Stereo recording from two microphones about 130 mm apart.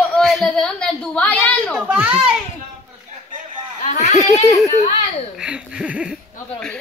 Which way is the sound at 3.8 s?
60° left (ahead or behind).